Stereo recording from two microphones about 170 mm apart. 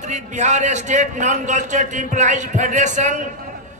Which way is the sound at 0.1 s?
45° right (ahead or behind).